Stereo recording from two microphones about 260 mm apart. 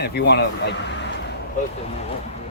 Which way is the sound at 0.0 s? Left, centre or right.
Left.